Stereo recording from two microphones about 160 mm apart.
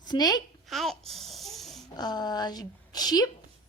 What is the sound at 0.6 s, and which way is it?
Babbling, centre (ahead or behind).